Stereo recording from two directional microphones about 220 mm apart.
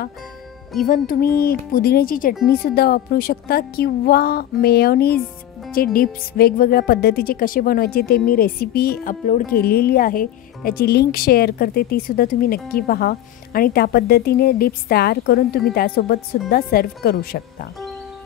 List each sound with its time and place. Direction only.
0.8 s speech: 40° left (ahead or behind)